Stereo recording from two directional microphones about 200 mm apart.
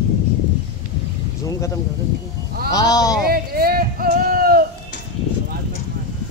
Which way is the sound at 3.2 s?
50° right (ahead or behind).